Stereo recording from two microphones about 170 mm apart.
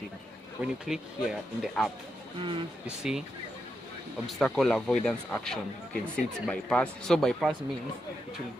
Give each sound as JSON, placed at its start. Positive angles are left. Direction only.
{"t": 0.6, "sound": "speech", "side_deg": -5}
{"t": 2.4, "sound": "speech", "side_deg": -30}
{"t": 2.8, "sound": "speech", "side_deg": -5}
{"t": 4.3, "sound": "speech", "side_deg": 0}